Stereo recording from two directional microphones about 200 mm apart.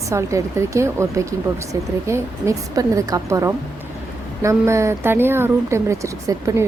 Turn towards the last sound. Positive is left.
turn(degrees=-15)  # may be behind; listen again after turning